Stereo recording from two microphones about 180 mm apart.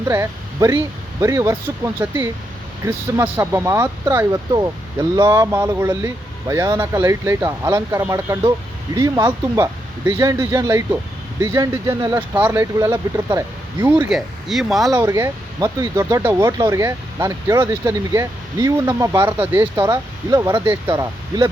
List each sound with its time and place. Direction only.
0.1 s speech: 15° right (ahead or behind)
14.1 s speech: centre (ahead or behind)
14.9 s speech: 15° right (ahead or behind)